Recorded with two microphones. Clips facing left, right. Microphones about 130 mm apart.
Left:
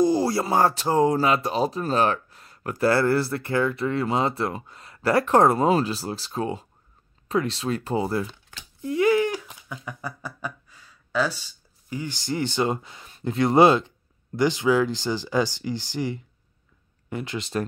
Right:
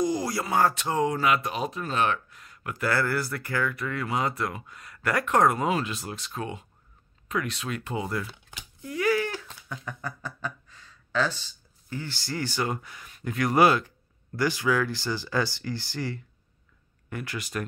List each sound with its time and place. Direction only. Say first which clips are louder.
0.0 s speech: left 6 dB; 30° left (ahead or behind)
8.5 s a sound: even; 15° right (ahead or behind)
8.8 s speech: left 6 dB; 25° left (ahead or behind)